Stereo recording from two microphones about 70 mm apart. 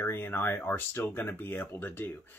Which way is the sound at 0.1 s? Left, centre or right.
Left.